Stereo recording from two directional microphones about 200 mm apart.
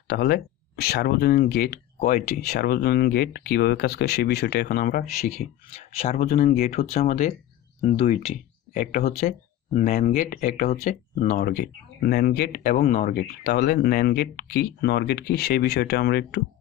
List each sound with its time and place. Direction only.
0.1 s speech: 55° left (ahead or behind)
5.7 s speech: 35° left (ahead or behind)
6.2 s speech: 45° left (ahead or behind)
6.9 s speech: 35° left (ahead or behind)
12.7 s speech: 35° left (ahead or behind)
13.5 s speech: 50° left (ahead or behind)